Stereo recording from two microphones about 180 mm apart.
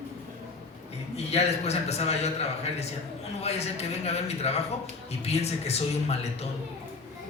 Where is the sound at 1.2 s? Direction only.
35° left (ahead or behind).